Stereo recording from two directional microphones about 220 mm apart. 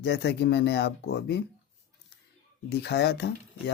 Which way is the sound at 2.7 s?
50° left (ahead or behind).